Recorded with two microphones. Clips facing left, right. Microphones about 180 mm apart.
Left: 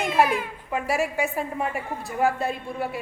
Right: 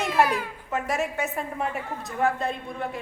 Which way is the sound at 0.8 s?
5° left (ahead or behind).